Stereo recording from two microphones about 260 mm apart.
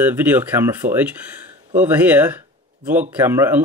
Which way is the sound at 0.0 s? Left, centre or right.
Centre.